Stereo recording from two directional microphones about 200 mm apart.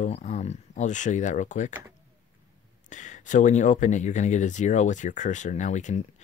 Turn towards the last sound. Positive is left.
turn(degrees=35)  # may be behind; listen again after turning